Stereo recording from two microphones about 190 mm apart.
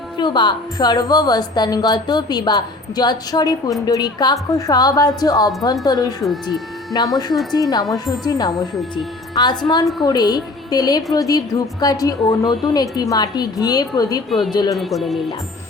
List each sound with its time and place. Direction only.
0.2 s a woman's voice: 25° left (ahead or behind)
6.2 s speech: centre (ahead or behind)
6.9 s a woman's voice: 20° left (ahead or behind)
14.8 s speech: centre (ahead or behind)